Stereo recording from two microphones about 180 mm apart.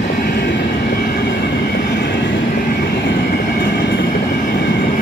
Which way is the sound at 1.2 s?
75° left (ahead or behind).